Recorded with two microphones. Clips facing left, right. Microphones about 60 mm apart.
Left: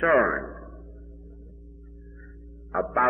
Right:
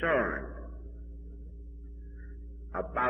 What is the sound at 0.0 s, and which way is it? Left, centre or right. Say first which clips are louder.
Speech: left 8 dB; centre.